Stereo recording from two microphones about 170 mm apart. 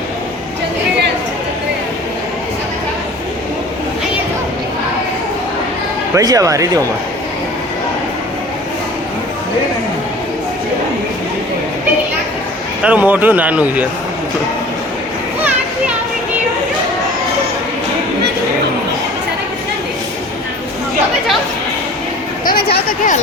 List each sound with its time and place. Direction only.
6.1 s speech: 20° right (ahead or behind)
12.8 s speech: 10° right (ahead or behind)
22.4 s a sound: 60° left (ahead or behind)